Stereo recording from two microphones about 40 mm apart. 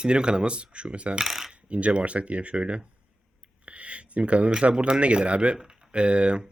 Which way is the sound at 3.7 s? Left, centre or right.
Right.